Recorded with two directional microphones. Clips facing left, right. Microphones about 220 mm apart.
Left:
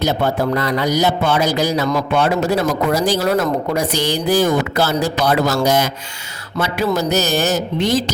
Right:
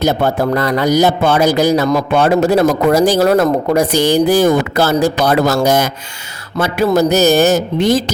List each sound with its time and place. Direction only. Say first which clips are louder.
0.0 s speech: right 3 dB; 50° right (ahead or behind)